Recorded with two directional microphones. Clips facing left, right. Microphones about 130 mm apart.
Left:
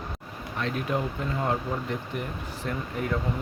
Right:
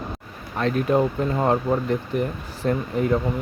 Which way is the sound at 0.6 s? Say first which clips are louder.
Right 9 dB; 45° right (ahead or behind).